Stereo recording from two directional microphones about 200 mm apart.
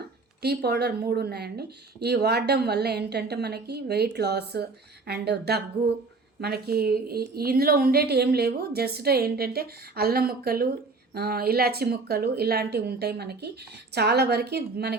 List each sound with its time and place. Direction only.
0.4 s a woman's voice: 55° right (ahead or behind)